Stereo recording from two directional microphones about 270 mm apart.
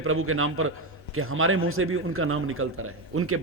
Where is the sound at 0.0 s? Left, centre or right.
Right.